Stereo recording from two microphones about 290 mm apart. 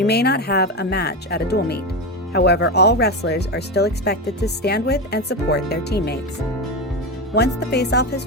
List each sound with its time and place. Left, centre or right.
0.0 s speech: left
7.3 s speech: left